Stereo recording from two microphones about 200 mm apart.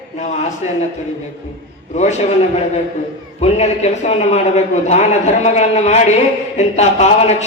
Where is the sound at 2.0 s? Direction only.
35° left (ahead or behind).